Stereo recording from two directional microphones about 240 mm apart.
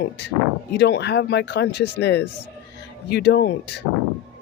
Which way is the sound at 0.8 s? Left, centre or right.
Left.